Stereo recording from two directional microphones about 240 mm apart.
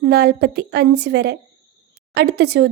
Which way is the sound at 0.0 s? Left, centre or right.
Right.